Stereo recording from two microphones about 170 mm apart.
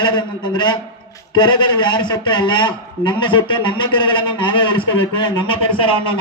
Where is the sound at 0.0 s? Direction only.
25° left (ahead or behind).